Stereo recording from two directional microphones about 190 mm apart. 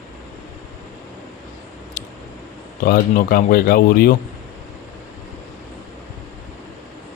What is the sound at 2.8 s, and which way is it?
Speech, 50° left (ahead or behind).